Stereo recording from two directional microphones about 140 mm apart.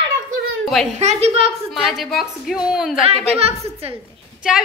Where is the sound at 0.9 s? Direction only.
50° right (ahead or behind).